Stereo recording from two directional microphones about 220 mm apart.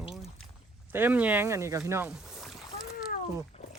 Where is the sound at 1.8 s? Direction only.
10° right (ahead or behind).